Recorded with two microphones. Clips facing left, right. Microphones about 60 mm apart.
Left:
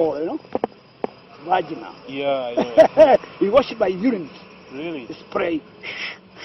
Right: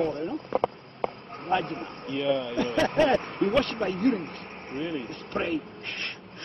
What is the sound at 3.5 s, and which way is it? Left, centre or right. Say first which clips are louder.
Speech: left 11 dB; left.